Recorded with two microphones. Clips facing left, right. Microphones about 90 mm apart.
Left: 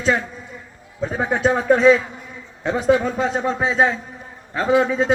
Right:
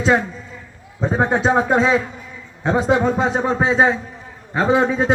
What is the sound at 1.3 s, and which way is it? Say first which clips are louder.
A man's voice: left 2 dB; 20° right (ahead or behind).